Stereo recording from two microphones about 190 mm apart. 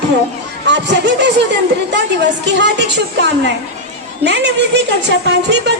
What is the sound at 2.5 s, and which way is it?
Speech, 65° right (ahead or behind).